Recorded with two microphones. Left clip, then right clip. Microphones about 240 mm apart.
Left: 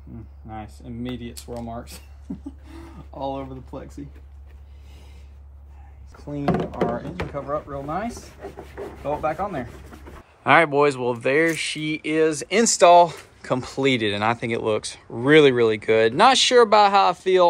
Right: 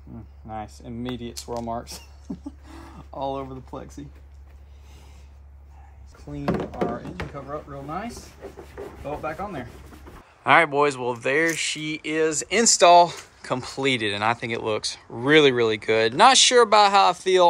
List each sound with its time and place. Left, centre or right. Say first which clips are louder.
0.5 s speech: right 2 dB; right
2.7 s a sound: right 1 dB; centre
6.4 s speech: left 3 dB; centre
10.4 s speech: left 1 dB; centre